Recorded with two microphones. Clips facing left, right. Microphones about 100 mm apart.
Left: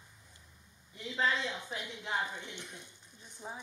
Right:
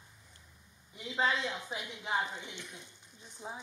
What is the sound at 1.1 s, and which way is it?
A woman's voice, 15° right (ahead or behind).